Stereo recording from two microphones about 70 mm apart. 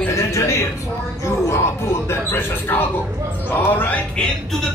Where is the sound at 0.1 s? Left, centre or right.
Left.